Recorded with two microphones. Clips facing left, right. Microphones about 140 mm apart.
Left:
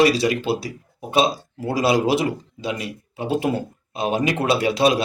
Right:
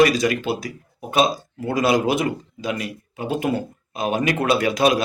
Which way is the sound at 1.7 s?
30° left (ahead or behind).